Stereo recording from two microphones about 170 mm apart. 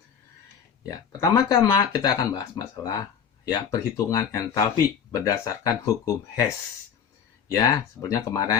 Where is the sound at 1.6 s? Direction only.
20° left (ahead or behind).